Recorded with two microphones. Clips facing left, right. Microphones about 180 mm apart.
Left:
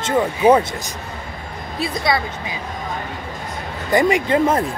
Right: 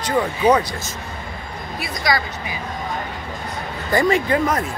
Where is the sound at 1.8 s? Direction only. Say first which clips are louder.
Left 2 dB; 30° left (ahead or behind).